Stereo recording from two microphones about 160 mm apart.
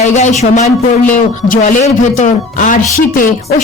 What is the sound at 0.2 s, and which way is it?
Speech, 50° left (ahead or behind).